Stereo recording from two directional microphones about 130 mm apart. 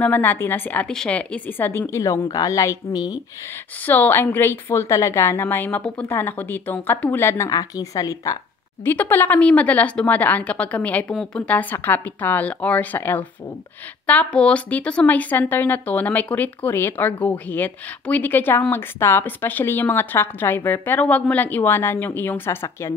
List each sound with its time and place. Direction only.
0.0 s a woman's voice: 15° left (ahead or behind); by 3.2 s 30° left (ahead or behind)
3.8 s speech: 15° left (ahead or behind)
8.8 s speech: 15° left (ahead or behind)